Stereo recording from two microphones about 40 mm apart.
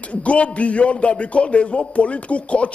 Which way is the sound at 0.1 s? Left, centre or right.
Left.